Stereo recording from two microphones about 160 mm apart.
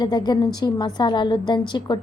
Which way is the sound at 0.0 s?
25° left (ahead or behind).